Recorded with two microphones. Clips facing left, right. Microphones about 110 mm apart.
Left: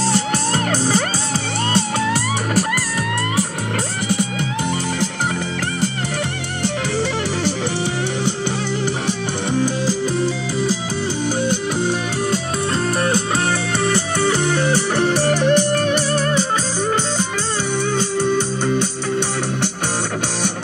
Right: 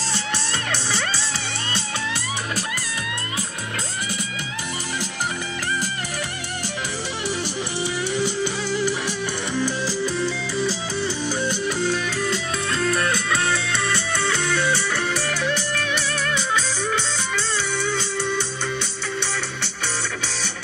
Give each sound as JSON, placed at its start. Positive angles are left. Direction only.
{"t": 0.7, "sound": "music", "side_deg": 40}
{"t": 12.8, "sound": "music", "side_deg": 35}
{"t": 15.0, "sound": "music", "side_deg": 60}
{"t": 17.9, "sound": "music", "side_deg": 45}